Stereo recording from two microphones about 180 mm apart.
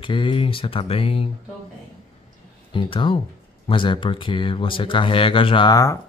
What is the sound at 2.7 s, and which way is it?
Speech, 30° left (ahead or behind).